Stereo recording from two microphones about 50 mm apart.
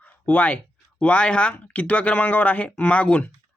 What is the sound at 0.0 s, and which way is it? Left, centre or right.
Speech, left.